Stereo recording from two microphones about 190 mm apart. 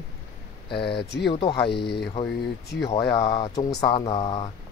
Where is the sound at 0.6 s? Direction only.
25° left (ahead or behind).